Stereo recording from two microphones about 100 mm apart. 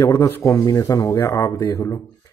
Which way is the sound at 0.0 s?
35° left (ahead or behind).